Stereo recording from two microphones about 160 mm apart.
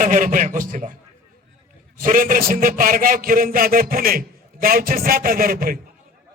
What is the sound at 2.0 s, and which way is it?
A man's voice, 55° right (ahead or behind).